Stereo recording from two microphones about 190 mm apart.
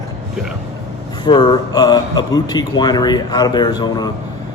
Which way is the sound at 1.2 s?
25° left (ahead or behind).